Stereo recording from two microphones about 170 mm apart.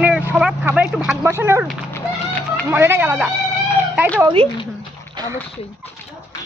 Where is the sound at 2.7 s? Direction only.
10° right (ahead or behind).